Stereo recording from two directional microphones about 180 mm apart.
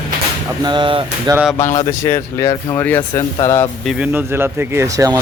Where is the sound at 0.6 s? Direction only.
25° right (ahead or behind).